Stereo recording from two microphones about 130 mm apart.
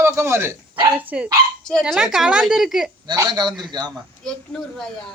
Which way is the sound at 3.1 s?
35° right (ahead or behind).